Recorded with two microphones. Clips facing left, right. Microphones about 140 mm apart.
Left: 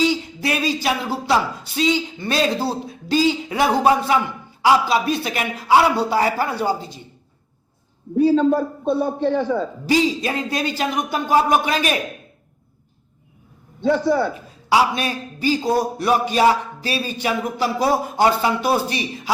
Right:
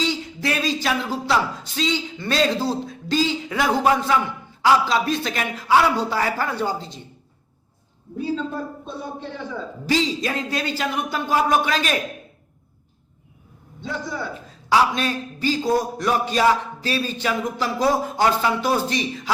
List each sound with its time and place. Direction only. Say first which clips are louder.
0.0 s a man's voice: left 4 dB; 15° left (ahead or behind)
8.2 s a man's voice: left 10 dB; 65° left (ahead or behind)
9.8 s a man's voice: left 2 dB; 15° left (ahead or behind)
14.7 s a man's voice: left 1 dB; 15° left (ahead or behind)